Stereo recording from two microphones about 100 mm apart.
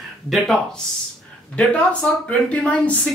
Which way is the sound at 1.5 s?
15° left (ahead or behind).